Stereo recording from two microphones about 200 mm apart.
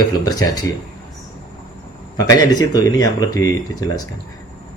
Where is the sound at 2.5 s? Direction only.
20° left (ahead or behind).